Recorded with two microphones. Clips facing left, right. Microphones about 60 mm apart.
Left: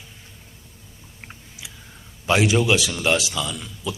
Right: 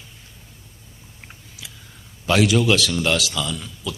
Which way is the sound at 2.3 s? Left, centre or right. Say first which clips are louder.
Right 1 dB; left.